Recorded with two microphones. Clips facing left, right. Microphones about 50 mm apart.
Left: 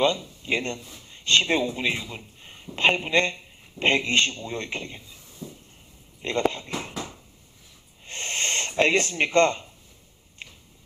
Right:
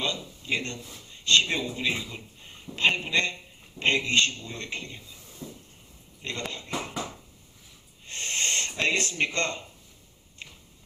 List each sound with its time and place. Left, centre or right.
0.0 s speech: left
6.2 s speech: left
8.0 s a sound: left